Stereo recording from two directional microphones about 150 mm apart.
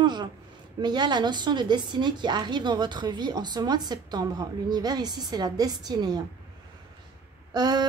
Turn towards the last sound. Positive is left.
turn(degrees=-30)  # may be behind; listen again after turning